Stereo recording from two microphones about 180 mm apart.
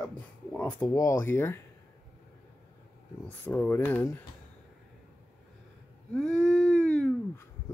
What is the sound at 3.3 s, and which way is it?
Speech, 10° left (ahead or behind).